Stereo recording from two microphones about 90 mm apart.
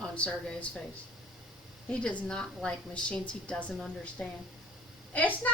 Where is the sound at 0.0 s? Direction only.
10° left (ahead or behind).